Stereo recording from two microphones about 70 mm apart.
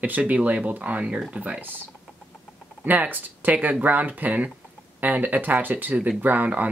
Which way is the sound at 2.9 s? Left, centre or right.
Right.